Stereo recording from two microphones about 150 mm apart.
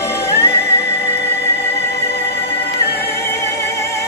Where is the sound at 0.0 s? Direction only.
15° left (ahead or behind).